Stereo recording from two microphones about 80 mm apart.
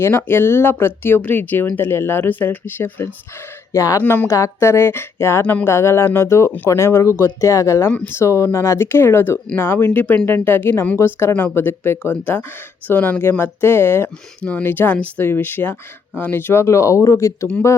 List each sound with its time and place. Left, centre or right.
0.0 s speech: left
3.7 s speech: left
4.0 s speech: left
4.3 s speech: left
12.9 s speech: centre; by 17.5 s left